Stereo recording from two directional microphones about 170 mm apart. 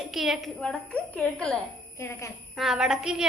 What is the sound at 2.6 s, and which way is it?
Speech, 5° right (ahead or behind).